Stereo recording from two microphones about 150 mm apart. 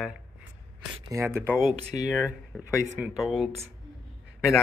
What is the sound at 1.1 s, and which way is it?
Speech, 15° right (ahead or behind).